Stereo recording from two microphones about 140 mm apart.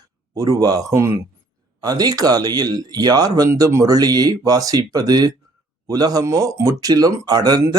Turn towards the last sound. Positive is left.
turn(degrees=-30)  # may be behind; listen again after turning